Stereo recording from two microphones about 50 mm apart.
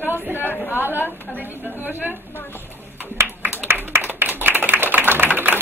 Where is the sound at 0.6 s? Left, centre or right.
Left.